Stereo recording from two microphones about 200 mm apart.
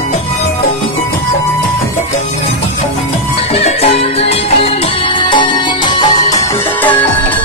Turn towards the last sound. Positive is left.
turn(degrees=25)  # may be behind; listen again after turning